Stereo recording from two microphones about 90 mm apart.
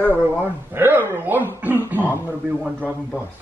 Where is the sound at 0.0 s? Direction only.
20° right (ahead or behind).